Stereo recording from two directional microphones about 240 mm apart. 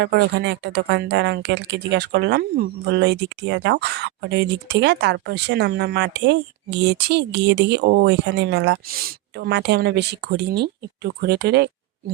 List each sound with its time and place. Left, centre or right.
0.0 s speech: right